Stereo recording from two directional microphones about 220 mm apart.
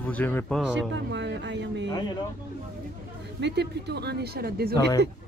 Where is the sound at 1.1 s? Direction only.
55° right (ahead or behind).